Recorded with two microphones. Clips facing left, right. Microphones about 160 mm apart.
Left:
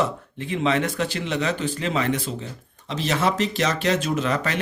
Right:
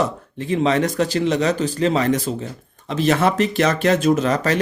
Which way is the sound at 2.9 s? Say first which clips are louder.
Right 5 dB; 50° right (ahead or behind).